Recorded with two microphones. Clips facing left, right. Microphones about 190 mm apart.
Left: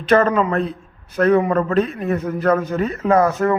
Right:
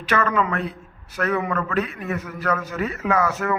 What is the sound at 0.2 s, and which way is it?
A man's voice, 35° left (ahead or behind).